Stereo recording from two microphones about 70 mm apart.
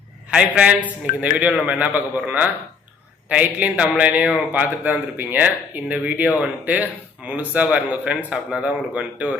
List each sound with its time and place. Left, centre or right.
0.3 s a man's voice: centre